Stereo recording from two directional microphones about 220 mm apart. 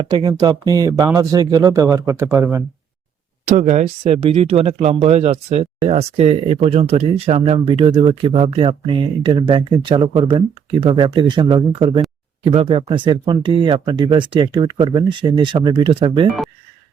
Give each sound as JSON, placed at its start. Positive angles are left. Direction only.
{"t": 0.0, "sound": "speech", "side_deg": -20}
{"t": 3.4, "sound": "speech", "side_deg": -35}